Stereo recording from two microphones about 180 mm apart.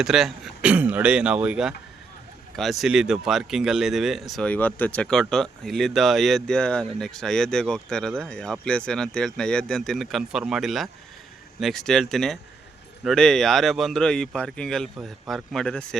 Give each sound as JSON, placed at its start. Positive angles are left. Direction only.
{"t": 0.0, "sound": "speech", "side_deg": 0}